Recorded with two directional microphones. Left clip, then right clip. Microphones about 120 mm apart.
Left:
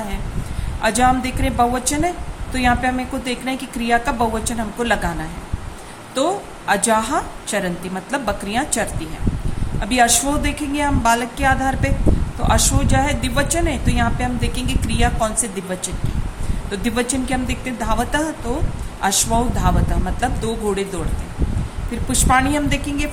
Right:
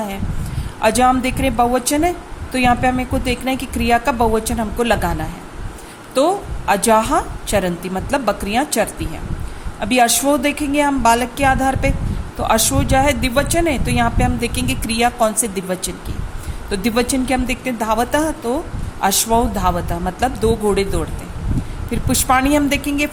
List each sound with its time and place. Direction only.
0.8 s a woman's voice: 45° right (ahead or behind)
6.1 s a woman's voice: 45° right (ahead or behind)
22.1 s a woman's voice: 65° right (ahead or behind)